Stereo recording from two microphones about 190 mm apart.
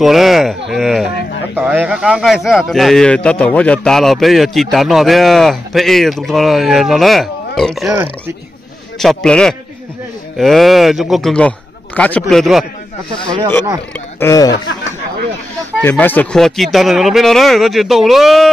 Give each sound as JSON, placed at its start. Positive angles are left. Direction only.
{"t": 0.0, "sound": "speech", "side_deg": 0}
{"t": 9.0, "sound": "speech", "side_deg": 5}
{"t": 14.2, "sound": "speech", "side_deg": 15}
{"t": 15.8, "sound": "speech", "side_deg": 10}